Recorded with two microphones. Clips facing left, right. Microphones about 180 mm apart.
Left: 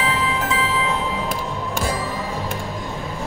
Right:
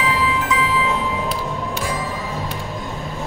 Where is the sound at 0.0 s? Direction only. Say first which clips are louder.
Right 2 dB; 30° left (ahead or behind).